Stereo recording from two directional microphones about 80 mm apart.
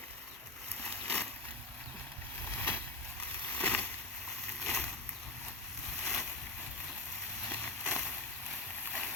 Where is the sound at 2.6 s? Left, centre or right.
Left.